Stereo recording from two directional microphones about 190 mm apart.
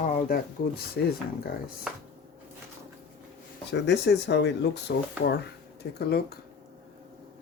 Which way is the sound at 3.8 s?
65° left (ahead or behind).